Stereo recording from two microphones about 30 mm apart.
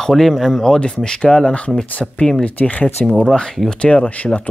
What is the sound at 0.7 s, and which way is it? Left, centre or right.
Speech, left.